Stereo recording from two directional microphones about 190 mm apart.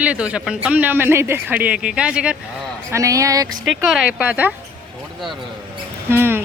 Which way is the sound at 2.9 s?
15° right (ahead or behind).